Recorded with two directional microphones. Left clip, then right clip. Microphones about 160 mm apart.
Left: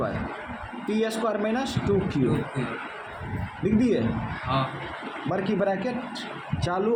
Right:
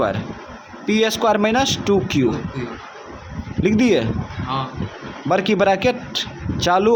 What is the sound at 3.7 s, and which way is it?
Speech, 50° right (ahead or behind).